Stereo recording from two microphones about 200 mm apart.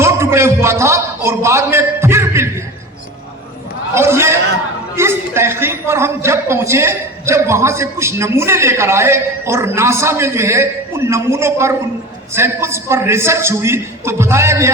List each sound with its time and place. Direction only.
0.0 s a man's voice: 15° right (ahead or behind)
3.9 s a man's voice: 15° right (ahead or behind)